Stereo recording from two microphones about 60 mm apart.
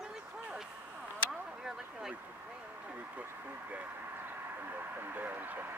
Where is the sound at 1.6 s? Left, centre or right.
Centre.